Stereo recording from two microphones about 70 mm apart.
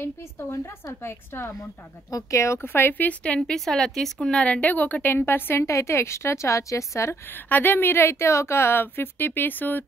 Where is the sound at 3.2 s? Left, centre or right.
Centre; by 5.7 s left.